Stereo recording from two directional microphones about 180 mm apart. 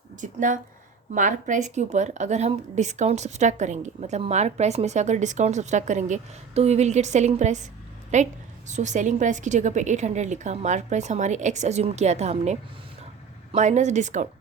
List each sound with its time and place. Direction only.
0.2 s a woman's voice: 45° right (ahead or behind)